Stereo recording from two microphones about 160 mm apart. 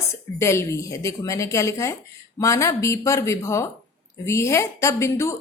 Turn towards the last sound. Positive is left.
turn(degrees=20)  # may be behind; listen again after turning